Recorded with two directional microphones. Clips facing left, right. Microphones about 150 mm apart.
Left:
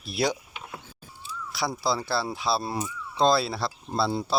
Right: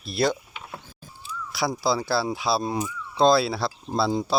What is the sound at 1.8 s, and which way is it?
Speech, centre (ahead or behind).